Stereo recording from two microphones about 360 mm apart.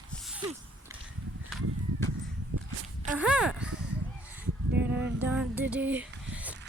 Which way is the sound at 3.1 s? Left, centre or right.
Centre.